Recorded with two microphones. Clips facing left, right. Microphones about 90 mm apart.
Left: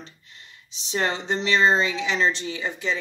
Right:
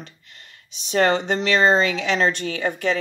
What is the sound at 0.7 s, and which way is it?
Speech, 60° right (ahead or behind).